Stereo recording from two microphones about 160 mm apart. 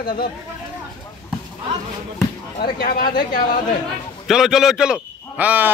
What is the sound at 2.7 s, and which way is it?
Speech, 70° left (ahead or behind).